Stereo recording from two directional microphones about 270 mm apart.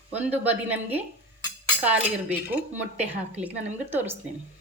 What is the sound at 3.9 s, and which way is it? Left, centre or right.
Speech, centre.